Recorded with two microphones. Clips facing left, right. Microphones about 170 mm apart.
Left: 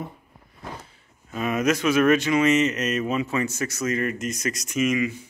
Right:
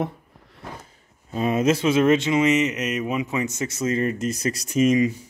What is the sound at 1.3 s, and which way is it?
Speech, 30° right (ahead or behind).